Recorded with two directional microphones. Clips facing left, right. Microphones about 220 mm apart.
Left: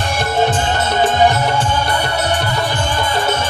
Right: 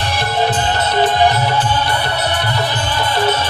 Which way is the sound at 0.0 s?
50° left (ahead or behind).